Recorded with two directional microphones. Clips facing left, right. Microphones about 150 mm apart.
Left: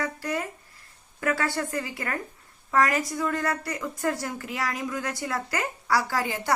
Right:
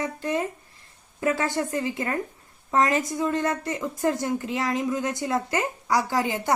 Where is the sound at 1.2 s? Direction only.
20° right (ahead or behind).